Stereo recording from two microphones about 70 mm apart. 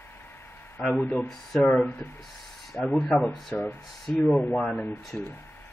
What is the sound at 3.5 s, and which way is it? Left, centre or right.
Speech, left.